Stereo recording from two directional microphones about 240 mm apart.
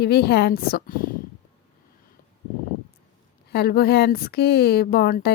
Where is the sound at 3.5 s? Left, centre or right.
Left.